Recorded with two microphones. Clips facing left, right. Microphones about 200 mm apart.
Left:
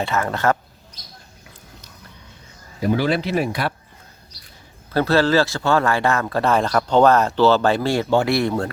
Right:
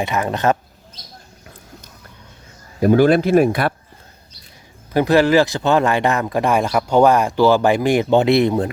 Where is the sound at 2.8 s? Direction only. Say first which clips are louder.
Right 7 dB; 50° right (ahead or behind).